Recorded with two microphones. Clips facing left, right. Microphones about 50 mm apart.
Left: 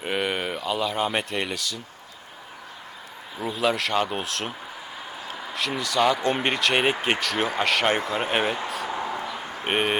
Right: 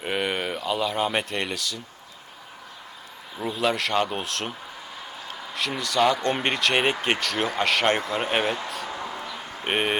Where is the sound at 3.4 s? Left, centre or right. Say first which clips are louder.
Even; centre.